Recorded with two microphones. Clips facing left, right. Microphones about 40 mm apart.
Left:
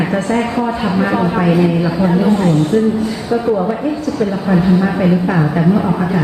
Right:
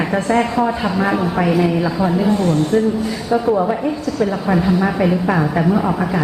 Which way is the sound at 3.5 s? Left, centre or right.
Centre.